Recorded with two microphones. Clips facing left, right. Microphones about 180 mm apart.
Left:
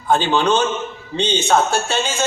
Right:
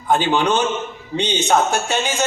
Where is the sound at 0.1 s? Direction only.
15° right (ahead or behind).